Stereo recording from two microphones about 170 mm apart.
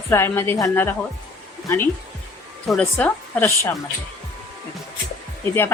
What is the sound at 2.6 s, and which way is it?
Speech, 5° left (ahead or behind).